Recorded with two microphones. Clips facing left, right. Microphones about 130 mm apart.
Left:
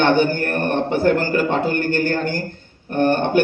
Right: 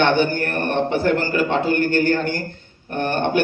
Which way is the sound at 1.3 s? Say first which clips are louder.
Even; 50° left (ahead or behind).